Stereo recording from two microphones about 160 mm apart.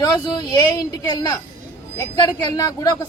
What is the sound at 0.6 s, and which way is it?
Speech, 25° left (ahead or behind).